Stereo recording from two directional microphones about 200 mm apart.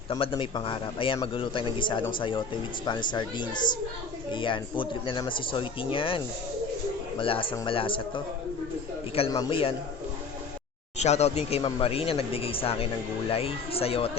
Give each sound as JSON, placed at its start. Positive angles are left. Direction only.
{"t": 0.1, "sound": "speech", "side_deg": 25}
{"t": 10.9, "sound": "speech", "side_deg": 35}